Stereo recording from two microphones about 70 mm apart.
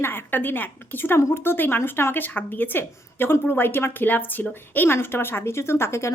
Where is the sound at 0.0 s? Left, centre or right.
Left.